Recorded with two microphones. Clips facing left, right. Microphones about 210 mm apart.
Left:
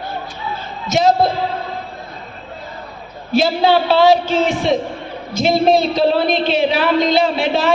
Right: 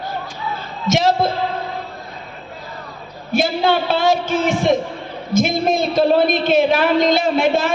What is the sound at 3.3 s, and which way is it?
A man's voice, 50° right (ahead or behind).